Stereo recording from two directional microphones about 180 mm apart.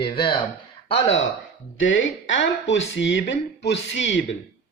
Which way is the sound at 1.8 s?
90° left.